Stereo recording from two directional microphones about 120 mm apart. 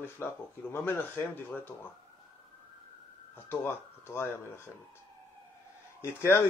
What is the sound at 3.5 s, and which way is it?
Speech, 20° left (ahead or behind).